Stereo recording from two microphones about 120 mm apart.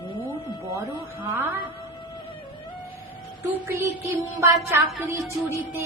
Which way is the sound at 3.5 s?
20° right (ahead or behind).